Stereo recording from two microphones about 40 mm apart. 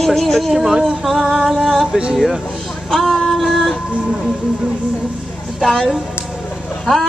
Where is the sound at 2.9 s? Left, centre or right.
Centre.